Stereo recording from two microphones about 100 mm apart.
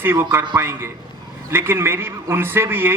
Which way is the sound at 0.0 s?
20° right (ahead or behind).